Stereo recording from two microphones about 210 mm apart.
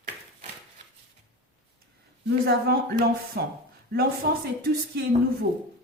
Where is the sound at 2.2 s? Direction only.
50° right (ahead or behind).